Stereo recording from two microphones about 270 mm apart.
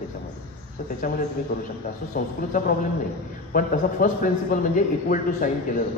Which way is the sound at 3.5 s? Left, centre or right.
Left.